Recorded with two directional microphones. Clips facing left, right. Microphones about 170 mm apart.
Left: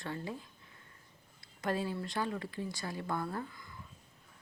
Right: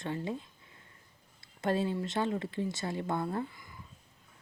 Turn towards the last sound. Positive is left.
turn(degrees=-20)  # may be behind; listen again after turning